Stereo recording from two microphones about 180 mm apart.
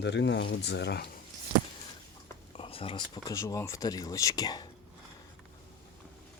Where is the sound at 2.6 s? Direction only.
30° left (ahead or behind).